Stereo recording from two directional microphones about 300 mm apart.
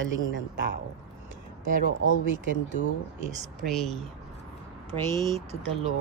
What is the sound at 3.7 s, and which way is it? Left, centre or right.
Speech, centre.